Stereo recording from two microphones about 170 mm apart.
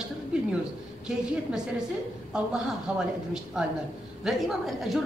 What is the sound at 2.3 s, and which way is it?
A man's voice, 5° right (ahead or behind).